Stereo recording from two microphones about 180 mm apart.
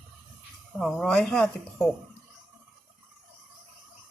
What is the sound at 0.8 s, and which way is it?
Speech, centre (ahead or behind).